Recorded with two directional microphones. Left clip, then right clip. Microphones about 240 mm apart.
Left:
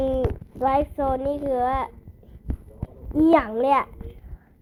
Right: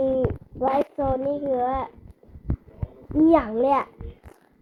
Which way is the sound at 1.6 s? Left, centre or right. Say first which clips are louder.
Left 1 dB; centre.